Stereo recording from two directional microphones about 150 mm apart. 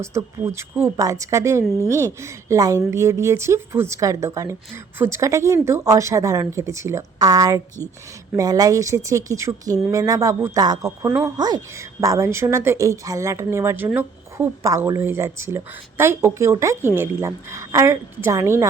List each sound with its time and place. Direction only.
0.0 s a woman's voice: 20° right (ahead or behind)